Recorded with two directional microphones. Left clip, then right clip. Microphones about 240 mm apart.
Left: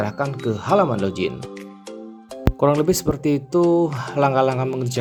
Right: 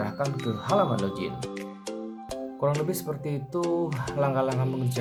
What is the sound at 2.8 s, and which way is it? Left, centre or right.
Speech, left.